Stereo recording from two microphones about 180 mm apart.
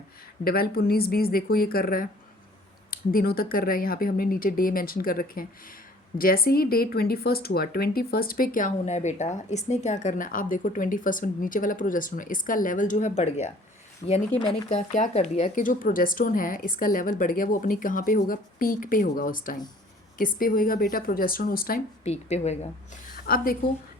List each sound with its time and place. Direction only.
0.4 s speech: 55° left (ahead or behind)
22.0 s a woman's voice: 35° left (ahead or behind)
23.2 s speech: 55° left (ahead or behind)